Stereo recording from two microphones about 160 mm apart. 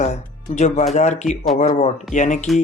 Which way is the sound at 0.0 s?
45° left (ahead or behind).